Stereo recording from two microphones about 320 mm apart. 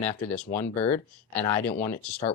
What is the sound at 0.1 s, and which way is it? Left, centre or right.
Speech, centre.